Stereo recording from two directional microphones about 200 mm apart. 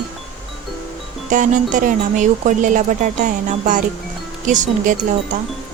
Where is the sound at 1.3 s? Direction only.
40° right (ahead or behind).